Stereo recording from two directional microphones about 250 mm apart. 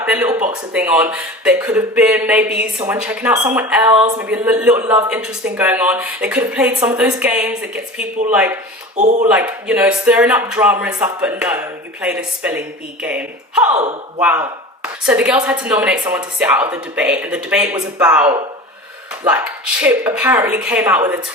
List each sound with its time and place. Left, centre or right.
0.0 s speech: centre
9.0 s speech: right
9.3 s speech: centre